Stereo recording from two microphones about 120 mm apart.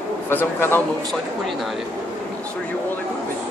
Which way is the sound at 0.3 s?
20° left (ahead or behind).